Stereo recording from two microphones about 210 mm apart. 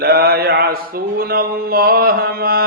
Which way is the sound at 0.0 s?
45° right (ahead or behind).